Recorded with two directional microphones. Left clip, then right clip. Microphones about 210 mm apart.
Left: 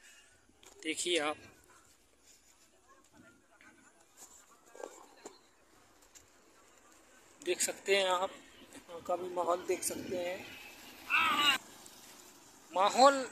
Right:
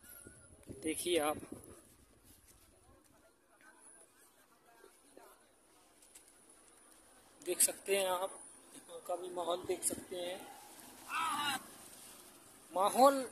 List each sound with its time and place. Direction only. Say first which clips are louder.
0.7 s speech: left 2 dB; 10° right (ahead or behind)
7.3 s speech: left 3 dB; 5° left (ahead or behind)
9.0 s speech: left 5 dB; 25° left (ahead or behind)
11.1 s vehicle: left 8 dB; 30° right (ahead or behind)
12.7 s speech: left 3 dB; 10° right (ahead or behind)